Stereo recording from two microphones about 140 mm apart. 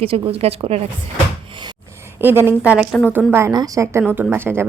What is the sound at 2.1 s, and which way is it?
Speech, 15° right (ahead or behind).